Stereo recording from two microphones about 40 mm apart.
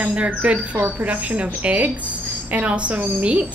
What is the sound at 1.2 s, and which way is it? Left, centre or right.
A woman's voice, right.